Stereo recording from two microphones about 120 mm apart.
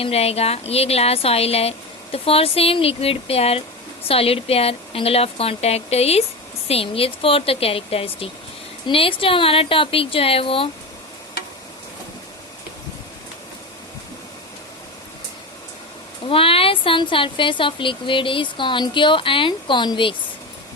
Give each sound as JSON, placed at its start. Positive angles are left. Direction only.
{"t": 0.0, "sound": "a woman's voice", "side_deg": 55}
{"t": 16.2, "sound": "speech", "side_deg": 50}